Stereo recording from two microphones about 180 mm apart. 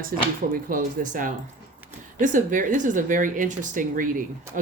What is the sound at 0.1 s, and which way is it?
Speech, 55° right (ahead or behind).